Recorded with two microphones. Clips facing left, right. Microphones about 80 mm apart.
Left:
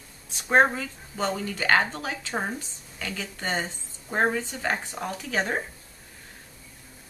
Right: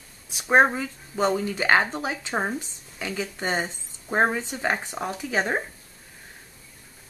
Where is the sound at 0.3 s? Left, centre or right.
Centre.